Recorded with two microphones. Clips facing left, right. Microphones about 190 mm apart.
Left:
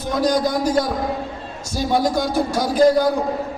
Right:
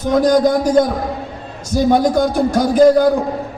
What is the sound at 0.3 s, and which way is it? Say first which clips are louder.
A man's voice: right 4 dB; 50° right (ahead or behind).